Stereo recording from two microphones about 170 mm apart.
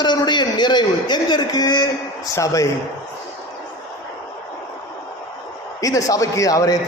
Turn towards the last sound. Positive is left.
turn(degrees=20)  # may be behind; listen again after turning